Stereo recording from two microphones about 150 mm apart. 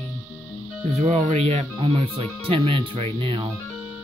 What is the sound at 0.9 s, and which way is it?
Speech, 45° right (ahead or behind).